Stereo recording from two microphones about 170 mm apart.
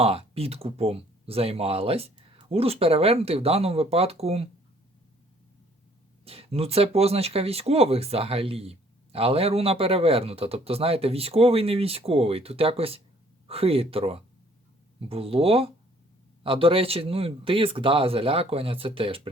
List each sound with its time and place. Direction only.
0.0 s speech: 35° right (ahead or behind)
6.2 s speech: 35° right (ahead or behind)